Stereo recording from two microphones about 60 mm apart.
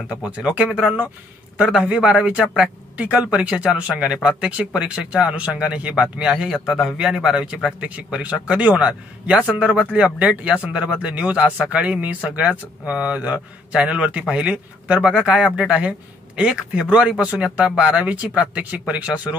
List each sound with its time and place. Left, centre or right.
0.2 s a man's voice: centre